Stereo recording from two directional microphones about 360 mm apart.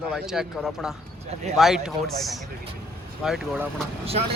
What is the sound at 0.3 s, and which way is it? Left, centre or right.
Speech, centre.